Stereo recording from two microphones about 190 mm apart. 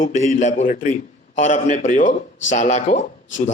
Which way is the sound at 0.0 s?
40° left (ahead or behind).